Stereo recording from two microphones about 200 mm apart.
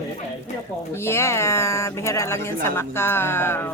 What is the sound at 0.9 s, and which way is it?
Speech, 15° left (ahead or behind).